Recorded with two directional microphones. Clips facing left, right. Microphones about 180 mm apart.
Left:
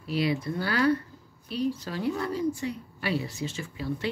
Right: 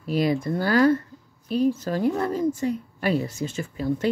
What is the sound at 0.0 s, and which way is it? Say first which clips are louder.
A woman's voice: right 5 dB; 45° right (ahead or behind).